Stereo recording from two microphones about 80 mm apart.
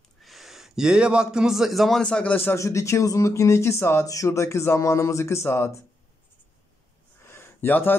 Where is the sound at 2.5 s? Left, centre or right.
Left.